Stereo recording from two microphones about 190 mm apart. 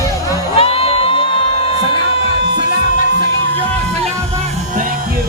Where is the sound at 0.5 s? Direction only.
30° left (ahead or behind).